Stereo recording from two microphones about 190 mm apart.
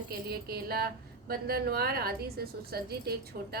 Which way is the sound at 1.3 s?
55° right (ahead or behind).